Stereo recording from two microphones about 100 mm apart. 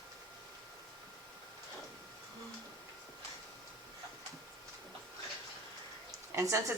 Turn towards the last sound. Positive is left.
turn(degrees=-25)  # may be behind; listen again after turning